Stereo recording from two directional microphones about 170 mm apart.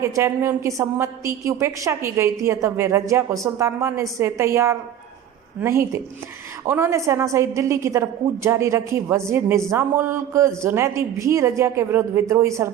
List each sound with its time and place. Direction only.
0.0 s a woman's voice: 15° right (ahead or behind)